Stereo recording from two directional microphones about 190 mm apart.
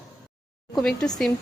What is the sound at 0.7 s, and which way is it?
Speech, 5° left (ahead or behind).